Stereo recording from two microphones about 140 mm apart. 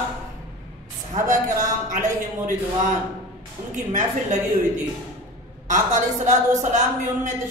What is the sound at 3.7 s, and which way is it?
Speech, 60° right (ahead or behind).